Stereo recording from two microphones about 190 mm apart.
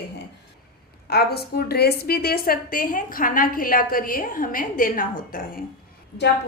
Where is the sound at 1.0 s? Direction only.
55° left (ahead or behind).